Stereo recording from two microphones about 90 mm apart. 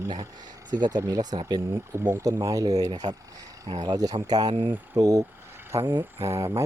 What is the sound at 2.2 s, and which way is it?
Speech, 40° right (ahead or behind).